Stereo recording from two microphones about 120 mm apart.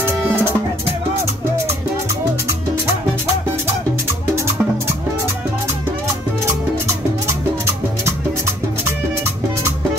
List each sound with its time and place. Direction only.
0.0 s music: 20° right (ahead or behind)